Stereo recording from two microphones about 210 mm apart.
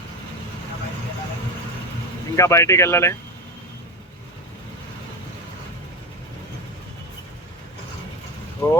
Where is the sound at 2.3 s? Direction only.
15° left (ahead or behind).